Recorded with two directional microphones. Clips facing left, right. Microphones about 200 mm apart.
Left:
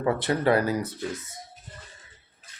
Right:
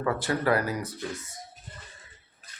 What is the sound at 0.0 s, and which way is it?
Speech, 25° left (ahead or behind).